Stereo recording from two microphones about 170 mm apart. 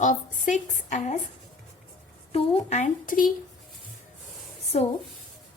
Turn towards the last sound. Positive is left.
turn(degrees=40)  # may be behind; listen again after turning